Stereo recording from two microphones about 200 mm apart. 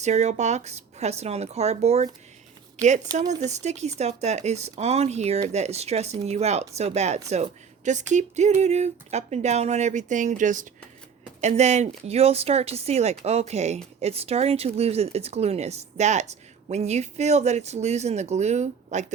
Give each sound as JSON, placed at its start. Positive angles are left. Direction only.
{"t": 0.0, "sound": "speech", "side_deg": -35}